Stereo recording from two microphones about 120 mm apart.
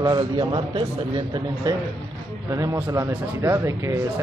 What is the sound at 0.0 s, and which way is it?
A man's voice, 40° right (ahead or behind).